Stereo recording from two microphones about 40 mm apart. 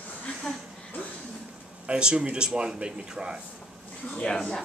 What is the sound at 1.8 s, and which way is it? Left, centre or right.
Speech, right.